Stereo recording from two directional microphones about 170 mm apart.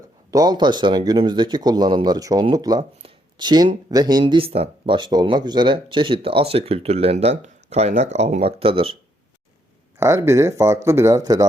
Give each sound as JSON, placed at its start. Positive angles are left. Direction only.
{"t": 0.3, "sound": "speech", "side_deg": -20}
{"t": 10.0, "sound": "speech", "side_deg": -15}